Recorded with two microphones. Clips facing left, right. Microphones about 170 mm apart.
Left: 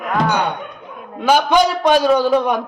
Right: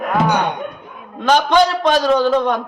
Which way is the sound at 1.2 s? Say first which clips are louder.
Even; 10° left (ahead or behind).